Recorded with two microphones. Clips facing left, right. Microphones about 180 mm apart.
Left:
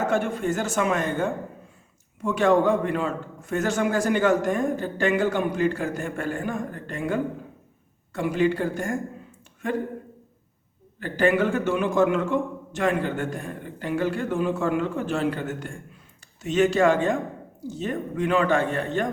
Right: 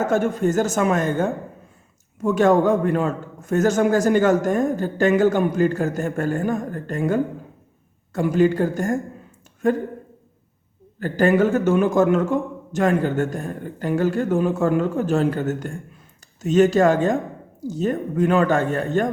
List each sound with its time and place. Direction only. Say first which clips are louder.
0.0 s a man's voice: right 4 dB; 40° right (ahead or behind)
11.0 s a man's voice: right 4 dB; 40° right (ahead or behind)